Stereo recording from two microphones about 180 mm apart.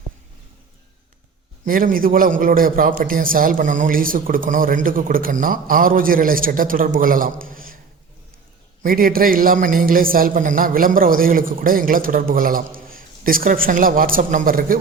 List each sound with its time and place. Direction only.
1.6 s a man's voice: 50° right (ahead or behind)
8.8 s a man's voice: 55° right (ahead or behind)